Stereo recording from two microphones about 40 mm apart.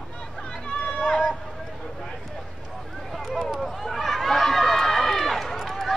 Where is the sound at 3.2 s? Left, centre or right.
Centre.